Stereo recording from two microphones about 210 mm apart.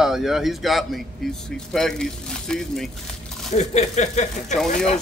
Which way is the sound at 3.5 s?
30° left (ahead or behind).